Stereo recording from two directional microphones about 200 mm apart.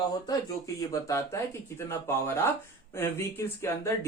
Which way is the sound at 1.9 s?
10° left (ahead or behind).